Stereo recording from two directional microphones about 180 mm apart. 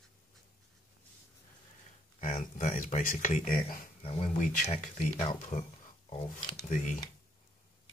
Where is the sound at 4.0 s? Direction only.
35° left (ahead or behind).